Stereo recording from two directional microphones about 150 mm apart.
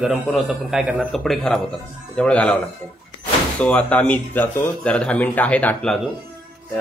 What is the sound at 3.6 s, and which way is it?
A man's voice, 10° left (ahead or behind).